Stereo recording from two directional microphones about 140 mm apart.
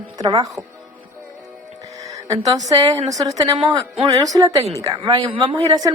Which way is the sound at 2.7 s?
25° right (ahead or behind).